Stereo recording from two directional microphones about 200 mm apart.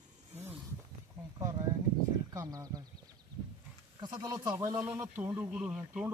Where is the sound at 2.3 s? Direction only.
15° right (ahead or behind).